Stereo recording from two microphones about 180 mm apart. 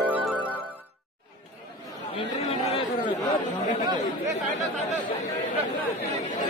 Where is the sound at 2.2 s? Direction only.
30° left (ahead or behind).